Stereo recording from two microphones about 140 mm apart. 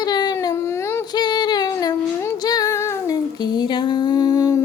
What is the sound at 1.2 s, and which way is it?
Female singing, 30° left (ahead or behind).